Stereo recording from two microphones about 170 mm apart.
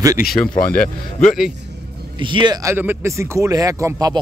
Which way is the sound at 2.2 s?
25° right (ahead or behind).